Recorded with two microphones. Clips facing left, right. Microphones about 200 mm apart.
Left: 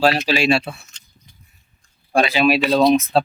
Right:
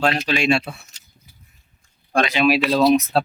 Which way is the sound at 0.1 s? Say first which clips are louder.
Left 2 dB; 30° left (ahead or behind).